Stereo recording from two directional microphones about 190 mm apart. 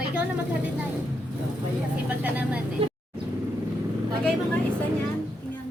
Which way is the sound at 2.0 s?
10° right (ahead or behind).